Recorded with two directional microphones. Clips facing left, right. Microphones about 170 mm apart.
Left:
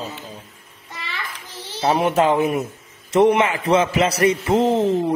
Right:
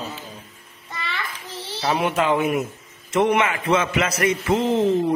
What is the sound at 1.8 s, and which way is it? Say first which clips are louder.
A man's voice: left 4 dB; 35° left (ahead or behind).